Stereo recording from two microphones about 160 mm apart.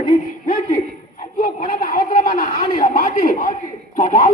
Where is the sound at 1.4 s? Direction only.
60° left (ahead or behind).